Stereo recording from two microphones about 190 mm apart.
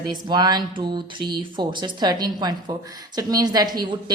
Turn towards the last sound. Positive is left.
turn(degrees=-20)  # may be behind; listen again after turning